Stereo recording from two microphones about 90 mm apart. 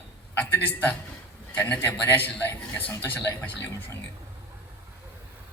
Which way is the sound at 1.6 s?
20° left (ahead or behind).